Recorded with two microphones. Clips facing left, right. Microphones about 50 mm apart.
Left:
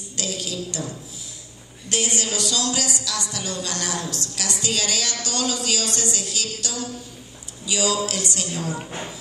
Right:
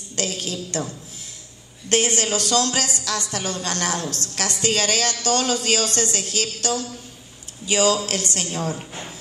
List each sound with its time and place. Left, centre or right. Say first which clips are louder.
0.1 s a woman's voice: right 2 dB; right
1.9 s a woman's voice: right 5 dB; right
8.7 s speech: left 3 dB; centre